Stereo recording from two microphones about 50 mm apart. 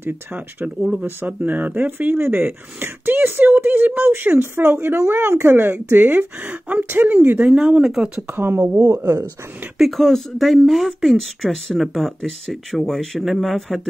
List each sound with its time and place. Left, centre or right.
0.0 s speech: right
0.7 s speech: centre
1.2 s speech: right
7.5 s speech: centre
8.4 s speech: right
8.7 s speech: right
9.8 s speech: centre